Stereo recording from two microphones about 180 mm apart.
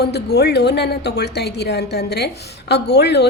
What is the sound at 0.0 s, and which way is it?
A woman's voice, 65° left (ahead or behind).